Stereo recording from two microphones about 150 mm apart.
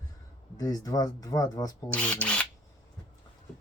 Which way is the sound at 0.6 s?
25° left (ahead or behind).